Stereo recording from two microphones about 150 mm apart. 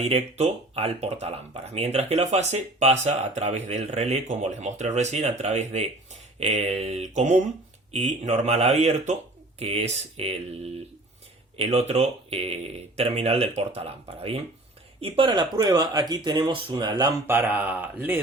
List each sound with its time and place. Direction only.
0.0 s speech: 45° right (ahead or behind); by 17.2 s 25° right (ahead or behind)
17.2 s speech: 15° right (ahead or behind)